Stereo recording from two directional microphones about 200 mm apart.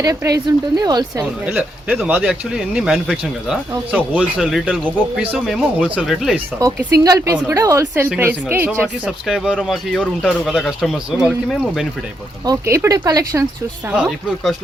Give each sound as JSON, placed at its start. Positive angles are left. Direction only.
{"t": 0.0, "sound": "a woman's voice", "side_deg": -15}
{"t": 1.5, "sound": "a woman's voice", "side_deg": -5}
{"t": 6.6, "sound": "a woman's voice", "side_deg": -15}
{"t": 12.5, "sound": "a woman's voice", "side_deg": -15}
{"t": 13.9, "sound": "a woman's voice", "side_deg": -5}